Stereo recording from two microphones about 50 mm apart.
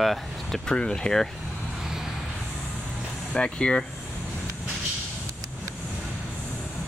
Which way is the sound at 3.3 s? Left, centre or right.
Centre.